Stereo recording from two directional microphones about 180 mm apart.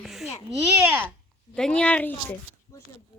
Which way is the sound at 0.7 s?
10° right (ahead or behind).